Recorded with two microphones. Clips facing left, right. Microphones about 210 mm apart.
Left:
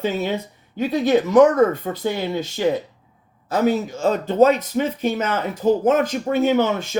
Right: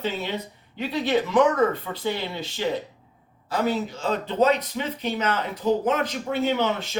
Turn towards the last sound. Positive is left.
turn(degrees=50)  # may be behind; listen again after turning